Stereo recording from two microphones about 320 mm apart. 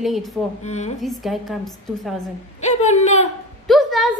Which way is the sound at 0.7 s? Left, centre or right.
Left.